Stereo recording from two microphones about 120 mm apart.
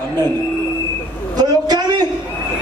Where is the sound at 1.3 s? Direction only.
35° right (ahead or behind).